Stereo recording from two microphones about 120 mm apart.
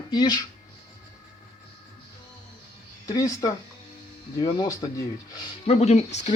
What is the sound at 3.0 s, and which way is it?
Speech, 30° left (ahead or behind).